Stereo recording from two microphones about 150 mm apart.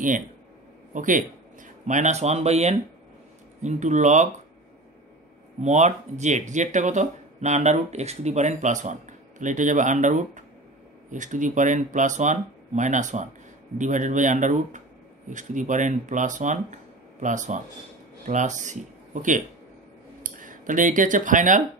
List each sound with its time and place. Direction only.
0.9 s speech: 60° right (ahead or behind)
5.6 s speech: 50° right (ahead or behind)
20.2 s speech: 60° right (ahead or behind)